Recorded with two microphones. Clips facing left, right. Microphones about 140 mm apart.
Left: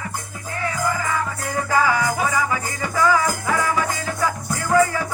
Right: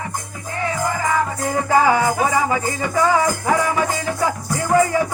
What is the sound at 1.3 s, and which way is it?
Music, 25° right (ahead or behind).